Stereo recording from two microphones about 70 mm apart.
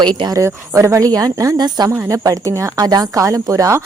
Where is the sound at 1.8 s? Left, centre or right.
Right.